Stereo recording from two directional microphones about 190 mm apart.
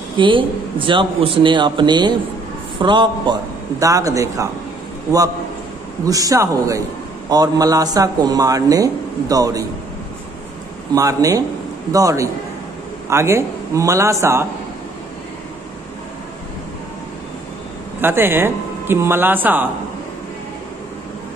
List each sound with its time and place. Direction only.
0.2 s a man's voice: 25° right (ahead or behind)
6.0 s a man's voice: 20° right (ahead or behind)
11.0 s speech: 20° right (ahead or behind)
18.0 s speech: 10° right (ahead or behind)